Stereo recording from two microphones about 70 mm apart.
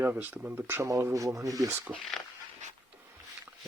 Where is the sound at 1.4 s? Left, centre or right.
Right.